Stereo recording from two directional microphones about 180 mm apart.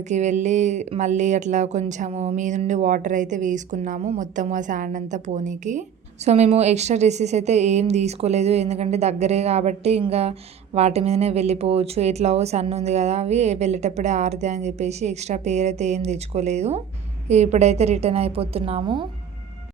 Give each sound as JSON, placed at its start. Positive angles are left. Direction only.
{"t": 0.1, "sound": "speech", "side_deg": -40}